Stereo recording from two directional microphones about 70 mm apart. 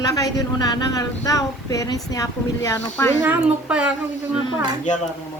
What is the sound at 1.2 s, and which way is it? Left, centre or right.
Speech, left.